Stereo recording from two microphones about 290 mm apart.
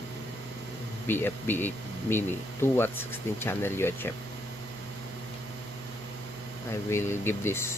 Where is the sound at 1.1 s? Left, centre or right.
Centre.